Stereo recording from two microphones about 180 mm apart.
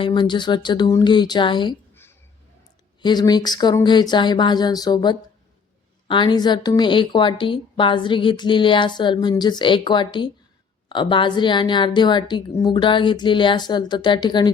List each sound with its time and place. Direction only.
0.0 s a woman's voice: 25° left (ahead or behind)
3.0 s a woman's voice: 25° left (ahead or behind)